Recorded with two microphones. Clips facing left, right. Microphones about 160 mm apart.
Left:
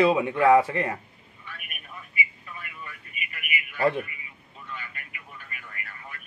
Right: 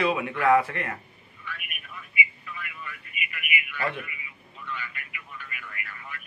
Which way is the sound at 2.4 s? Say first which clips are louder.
Right 2 dB; 35° left (ahead or behind).